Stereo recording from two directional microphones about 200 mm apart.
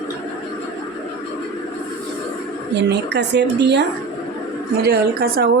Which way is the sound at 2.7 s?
60° right (ahead or behind).